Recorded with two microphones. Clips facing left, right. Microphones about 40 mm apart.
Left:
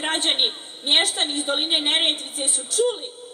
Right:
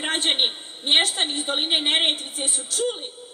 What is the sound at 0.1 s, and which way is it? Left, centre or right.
A woman's voice, centre.